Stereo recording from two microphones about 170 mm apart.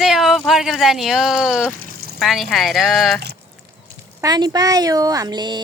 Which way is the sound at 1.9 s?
60° right (ahead or behind).